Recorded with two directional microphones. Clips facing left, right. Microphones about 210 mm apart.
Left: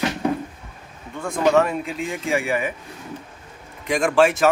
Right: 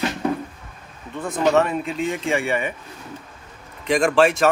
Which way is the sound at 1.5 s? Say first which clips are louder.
Left 1 dB; centre (ahead or behind).